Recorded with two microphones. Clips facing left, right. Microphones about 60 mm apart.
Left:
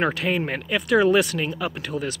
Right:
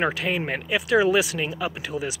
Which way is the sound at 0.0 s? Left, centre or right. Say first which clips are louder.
Left 1 dB; centre.